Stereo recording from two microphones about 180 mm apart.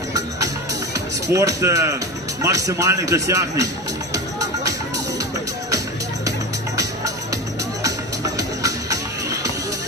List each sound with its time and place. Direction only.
0.1 s music: 20° right (ahead or behind)
1.3 s a man's voice: 15° right (ahead or behind)
6.7 s music: 20° right (ahead or behind)